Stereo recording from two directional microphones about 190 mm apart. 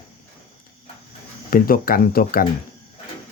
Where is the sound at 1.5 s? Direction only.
50° left (ahead or behind).